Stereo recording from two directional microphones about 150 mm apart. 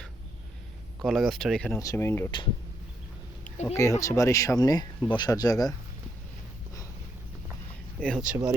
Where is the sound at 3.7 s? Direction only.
20° left (ahead or behind).